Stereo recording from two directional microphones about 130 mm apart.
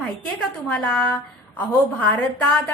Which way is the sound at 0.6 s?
10° left (ahead or behind).